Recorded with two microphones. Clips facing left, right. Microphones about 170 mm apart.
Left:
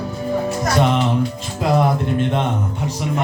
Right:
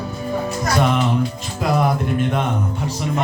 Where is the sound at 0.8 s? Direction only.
20° left (ahead or behind).